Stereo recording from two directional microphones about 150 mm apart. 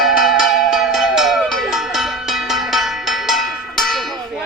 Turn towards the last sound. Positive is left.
turn(degrees=0)  # may be behind; listen again after turning